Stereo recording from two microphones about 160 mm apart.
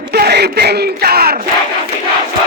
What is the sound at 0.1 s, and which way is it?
Speech, 90° right.